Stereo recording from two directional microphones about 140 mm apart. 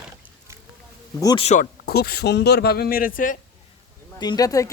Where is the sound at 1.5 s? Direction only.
80° left.